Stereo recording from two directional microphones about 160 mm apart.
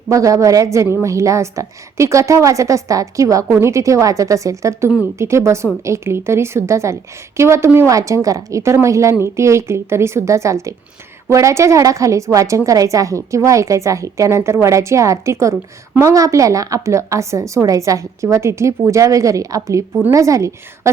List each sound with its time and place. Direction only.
0.1 s a woman's voice: 20° right (ahead or behind)